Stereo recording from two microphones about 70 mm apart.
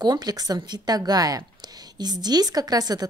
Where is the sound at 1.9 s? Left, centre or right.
Right.